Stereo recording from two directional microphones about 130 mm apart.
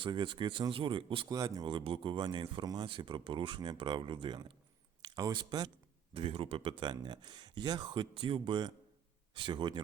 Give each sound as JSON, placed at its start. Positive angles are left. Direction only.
{"t": 0.0, "sound": "speech", "side_deg": -40}
{"t": 6.1, "sound": "speech", "side_deg": -45}